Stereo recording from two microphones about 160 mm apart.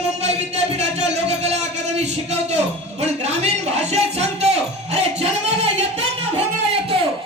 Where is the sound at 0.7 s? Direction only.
45° right (ahead or behind).